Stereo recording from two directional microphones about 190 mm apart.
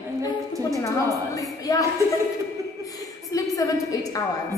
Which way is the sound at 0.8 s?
15° left (ahead or behind).